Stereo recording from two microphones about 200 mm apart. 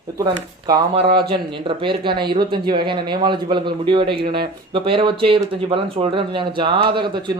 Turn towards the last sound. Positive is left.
turn(degrees=-25)  # may be behind; listen again after turning